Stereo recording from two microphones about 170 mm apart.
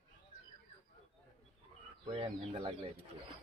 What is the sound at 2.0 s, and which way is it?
Speech, 30° right (ahead or behind).